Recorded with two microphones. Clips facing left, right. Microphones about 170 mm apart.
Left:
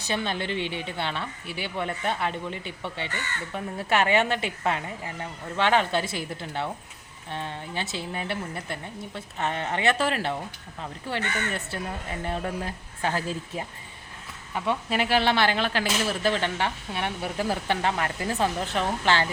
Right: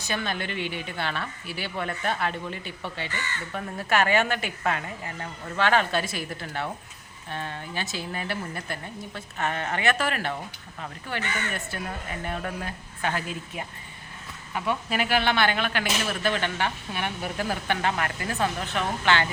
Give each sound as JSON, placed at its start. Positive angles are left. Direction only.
{"t": 0.1, "sound": "speech", "side_deg": 25}
{"t": 14.7, "sound": "speech", "side_deg": 25}